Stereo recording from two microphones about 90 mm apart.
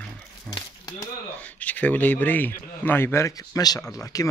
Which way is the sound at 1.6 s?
20° left (ahead or behind).